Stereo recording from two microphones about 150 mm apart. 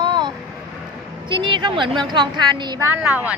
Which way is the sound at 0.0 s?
30° right (ahead or behind).